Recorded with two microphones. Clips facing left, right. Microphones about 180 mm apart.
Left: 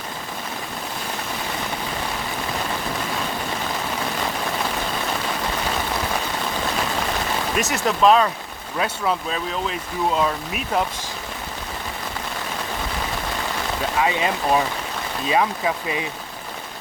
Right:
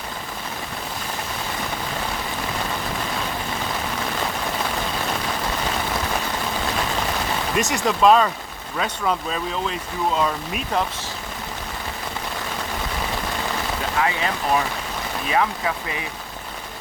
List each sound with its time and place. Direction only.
7.6 s speech: centre (ahead or behind)
14.0 s speech: 20° left (ahead or behind)